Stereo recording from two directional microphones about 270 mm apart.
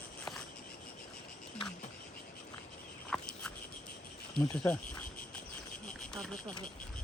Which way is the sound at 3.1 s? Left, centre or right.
Centre.